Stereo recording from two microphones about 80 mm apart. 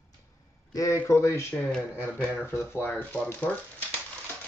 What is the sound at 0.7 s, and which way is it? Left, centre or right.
Speech, left.